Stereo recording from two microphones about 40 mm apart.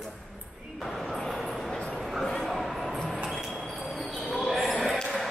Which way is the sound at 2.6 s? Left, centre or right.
Centre.